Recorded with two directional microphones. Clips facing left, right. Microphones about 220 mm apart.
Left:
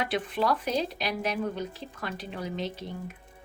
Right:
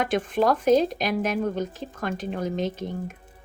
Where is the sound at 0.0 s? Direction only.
45° right (ahead or behind).